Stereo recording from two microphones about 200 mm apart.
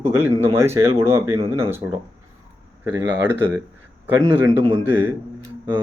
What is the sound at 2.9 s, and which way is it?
Speech, 10° right (ahead or behind).